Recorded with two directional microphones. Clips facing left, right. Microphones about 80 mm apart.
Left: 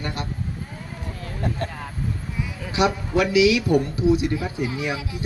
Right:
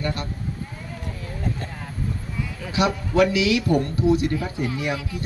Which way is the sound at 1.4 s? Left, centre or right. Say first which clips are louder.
Left 3 dB; left.